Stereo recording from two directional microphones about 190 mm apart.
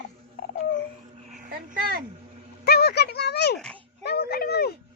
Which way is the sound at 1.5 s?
50° right (ahead or behind).